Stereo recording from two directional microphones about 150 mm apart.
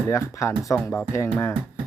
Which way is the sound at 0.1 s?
20° left (ahead or behind).